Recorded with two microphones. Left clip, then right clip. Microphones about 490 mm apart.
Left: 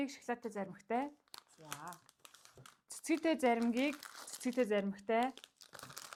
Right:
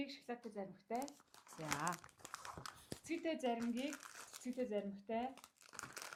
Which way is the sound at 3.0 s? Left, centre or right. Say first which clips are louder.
Left 9 dB; left.